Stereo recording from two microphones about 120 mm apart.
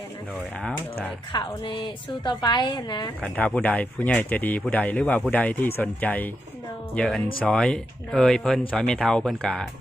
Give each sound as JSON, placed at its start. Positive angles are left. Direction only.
{"t": 1.3, "sound": "a woman's voice", "side_deg": 40}
{"t": 3.3, "sound": "speech", "side_deg": 10}